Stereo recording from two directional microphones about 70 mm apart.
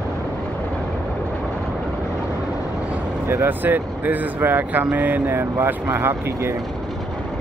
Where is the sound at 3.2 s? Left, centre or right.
Right.